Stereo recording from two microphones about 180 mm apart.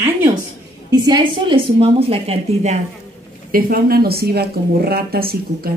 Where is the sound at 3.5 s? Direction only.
50° right (ahead or behind).